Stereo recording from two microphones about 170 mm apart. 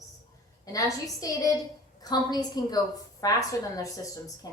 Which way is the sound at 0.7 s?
20° left (ahead or behind).